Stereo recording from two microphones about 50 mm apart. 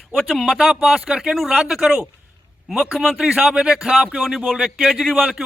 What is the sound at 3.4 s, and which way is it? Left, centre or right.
Speech, centre.